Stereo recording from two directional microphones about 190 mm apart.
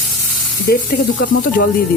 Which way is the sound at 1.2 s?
50° left (ahead or behind).